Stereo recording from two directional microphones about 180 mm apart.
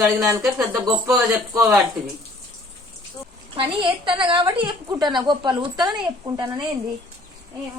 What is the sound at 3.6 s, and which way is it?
Speech, 30° right (ahead or behind).